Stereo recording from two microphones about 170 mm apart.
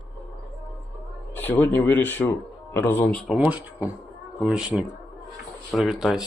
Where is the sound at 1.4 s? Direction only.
10° left (ahead or behind).